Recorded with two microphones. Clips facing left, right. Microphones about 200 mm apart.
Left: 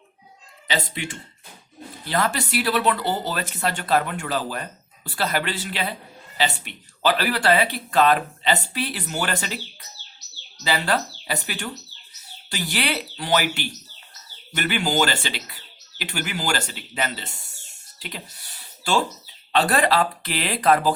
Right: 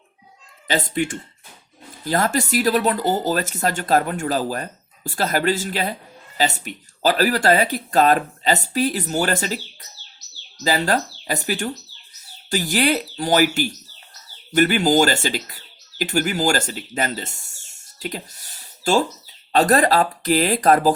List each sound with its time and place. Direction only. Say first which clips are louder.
0.7 s speech: right 6 dB; 45° right (ahead or behind)
10.6 s speech: right 3 dB; 40° right (ahead or behind)